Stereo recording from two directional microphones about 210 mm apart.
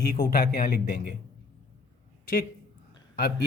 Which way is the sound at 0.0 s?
45° left (ahead or behind).